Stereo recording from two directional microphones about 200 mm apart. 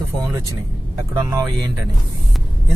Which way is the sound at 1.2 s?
5° right (ahead or behind).